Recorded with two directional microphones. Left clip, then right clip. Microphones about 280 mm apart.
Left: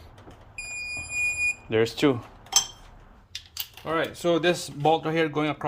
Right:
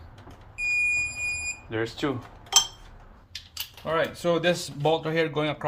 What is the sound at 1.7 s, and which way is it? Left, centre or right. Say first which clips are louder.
Speech: left 6 dB; left.